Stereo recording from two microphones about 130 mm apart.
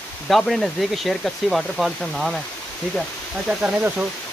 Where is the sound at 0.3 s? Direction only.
Centre (ahead or behind).